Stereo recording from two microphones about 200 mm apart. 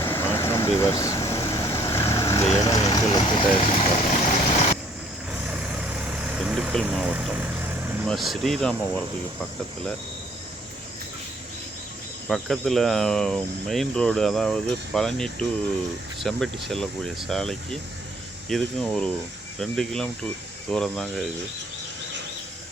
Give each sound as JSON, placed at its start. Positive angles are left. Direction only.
{"t": 0.0, "sound": "vehicle", "side_deg": 10}
{"t": 2.5, "sound": "speech", "side_deg": 15}
{"t": 5.5, "sound": "vehicle", "side_deg": -5}
{"t": 8.0, "sound": "speech", "side_deg": 0}
{"t": 12.3, "sound": "speech", "side_deg": 0}